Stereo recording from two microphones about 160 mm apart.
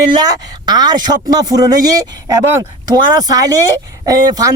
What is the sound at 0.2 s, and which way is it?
Speech, 25° right (ahead or behind).